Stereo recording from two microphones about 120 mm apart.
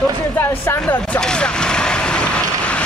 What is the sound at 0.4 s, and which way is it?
Speech, 20° left (ahead or behind).